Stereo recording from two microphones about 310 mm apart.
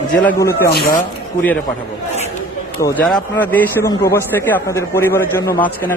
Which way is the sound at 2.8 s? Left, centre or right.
Centre.